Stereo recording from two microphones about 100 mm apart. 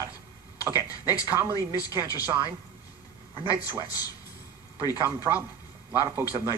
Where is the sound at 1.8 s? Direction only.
35° left (ahead or behind).